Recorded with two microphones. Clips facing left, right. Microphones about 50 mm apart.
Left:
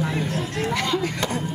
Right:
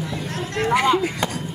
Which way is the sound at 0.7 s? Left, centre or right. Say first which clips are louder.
Right 8 dB; centre.